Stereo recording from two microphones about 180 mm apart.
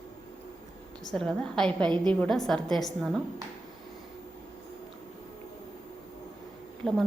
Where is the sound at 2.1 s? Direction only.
5° left (ahead or behind).